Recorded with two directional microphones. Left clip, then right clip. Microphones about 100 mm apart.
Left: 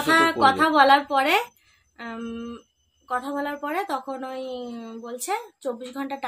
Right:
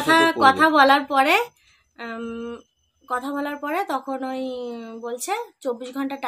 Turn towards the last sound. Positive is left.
turn(degrees=-35)  # may be behind; listen again after turning